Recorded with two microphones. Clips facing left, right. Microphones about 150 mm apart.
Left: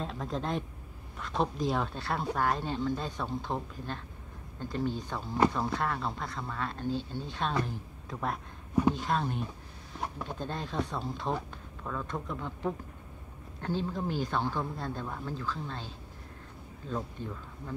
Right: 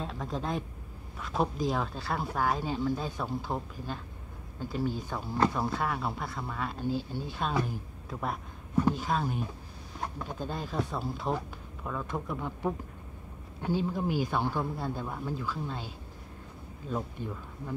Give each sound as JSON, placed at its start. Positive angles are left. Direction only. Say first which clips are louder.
{"t": 0.0, "sound": "speech", "louder": "even", "side_deg": 0}
{"t": 16.9, "sound": "speech", "louder": "right 1 dB", "side_deg": -10}